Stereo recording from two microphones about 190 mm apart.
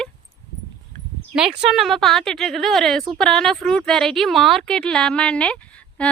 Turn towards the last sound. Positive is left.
turn(degrees=5)  # may be behind; listen again after turning